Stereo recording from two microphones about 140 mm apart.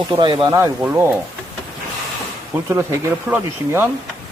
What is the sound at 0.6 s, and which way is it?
Speech, 15° right (ahead or behind).